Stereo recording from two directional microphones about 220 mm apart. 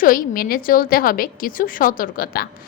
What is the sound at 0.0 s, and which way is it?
A woman's voice, 40° left (ahead or behind).